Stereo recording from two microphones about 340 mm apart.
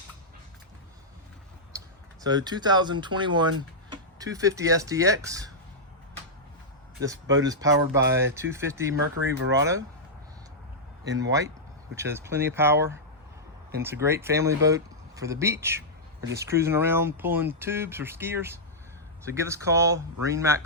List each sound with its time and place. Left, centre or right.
2.2 s speech: centre
7.0 s speech: centre
9.2 s speech: right
11.2 s speech: centre
14.0 s speech: centre